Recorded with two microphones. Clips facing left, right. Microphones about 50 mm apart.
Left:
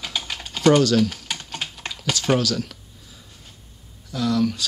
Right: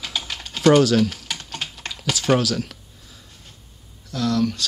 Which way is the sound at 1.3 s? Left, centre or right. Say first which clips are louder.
Even; centre.